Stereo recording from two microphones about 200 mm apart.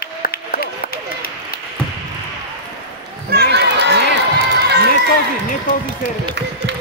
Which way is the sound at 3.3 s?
55° right (ahead or behind).